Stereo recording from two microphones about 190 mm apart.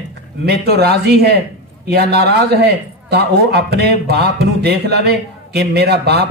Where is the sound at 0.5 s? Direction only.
55° right (ahead or behind).